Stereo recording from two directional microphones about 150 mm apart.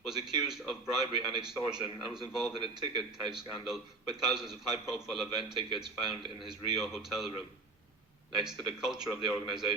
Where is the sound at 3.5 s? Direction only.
Centre (ahead or behind).